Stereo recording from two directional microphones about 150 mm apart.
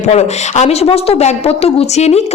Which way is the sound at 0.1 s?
45° left (ahead or behind).